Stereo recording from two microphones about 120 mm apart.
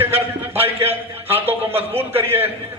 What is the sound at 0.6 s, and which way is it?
Speech, 55° right (ahead or behind).